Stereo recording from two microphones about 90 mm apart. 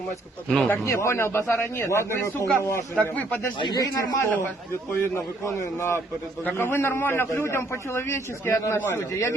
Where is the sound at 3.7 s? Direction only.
45° left (ahead or behind).